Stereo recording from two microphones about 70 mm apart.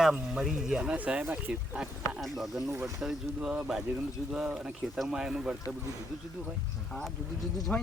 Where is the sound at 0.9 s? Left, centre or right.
Centre.